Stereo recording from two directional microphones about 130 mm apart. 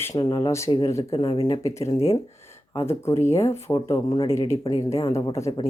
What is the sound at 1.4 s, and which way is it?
Speech, 25° left (ahead or behind).